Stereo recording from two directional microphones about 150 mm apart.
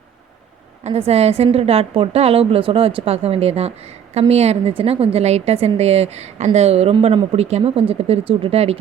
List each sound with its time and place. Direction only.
0.9 s a woman's voice: 45° right (ahead or behind)